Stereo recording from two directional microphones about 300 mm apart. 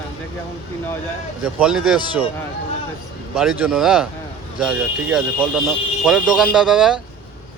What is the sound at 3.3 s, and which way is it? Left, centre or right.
Speech, centre.